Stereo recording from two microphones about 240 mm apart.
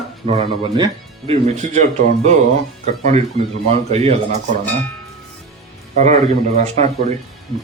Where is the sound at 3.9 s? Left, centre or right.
Right.